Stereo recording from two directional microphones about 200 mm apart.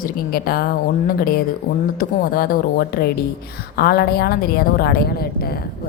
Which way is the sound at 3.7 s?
50° left (ahead or behind).